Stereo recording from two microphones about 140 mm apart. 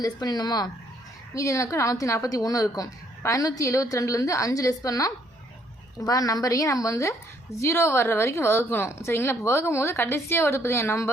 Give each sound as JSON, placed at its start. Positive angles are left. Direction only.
{"t": 0.0, "sound": "a woman's voice", "side_deg": 30}